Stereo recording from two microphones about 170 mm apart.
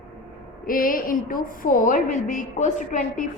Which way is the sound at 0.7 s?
55° left (ahead or behind).